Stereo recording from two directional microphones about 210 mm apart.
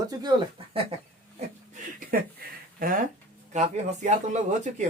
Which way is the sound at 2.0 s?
40° right (ahead or behind).